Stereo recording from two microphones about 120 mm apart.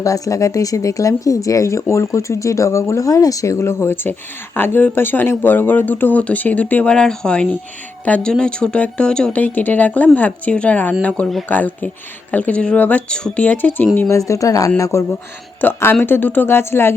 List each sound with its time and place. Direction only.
0.0 s speech: 30° left (ahead or behind)
14.2 s speech: 25° left (ahead or behind)